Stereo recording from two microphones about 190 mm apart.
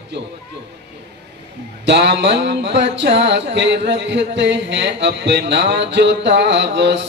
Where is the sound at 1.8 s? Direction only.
65° right (ahead or behind).